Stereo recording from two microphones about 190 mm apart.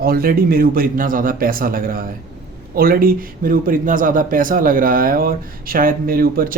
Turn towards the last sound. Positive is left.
turn(degrees=-50)  # may be behind; listen again after turning